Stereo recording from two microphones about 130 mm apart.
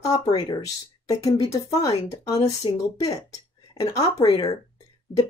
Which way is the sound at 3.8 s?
25° left (ahead or behind).